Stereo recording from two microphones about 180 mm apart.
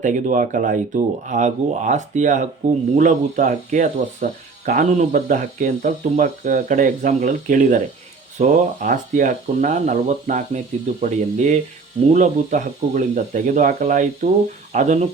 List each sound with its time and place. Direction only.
0.0 s speech: 45° right (ahead or behind)